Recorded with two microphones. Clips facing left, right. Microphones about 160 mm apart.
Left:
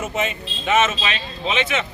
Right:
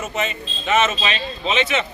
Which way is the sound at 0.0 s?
10° left (ahead or behind).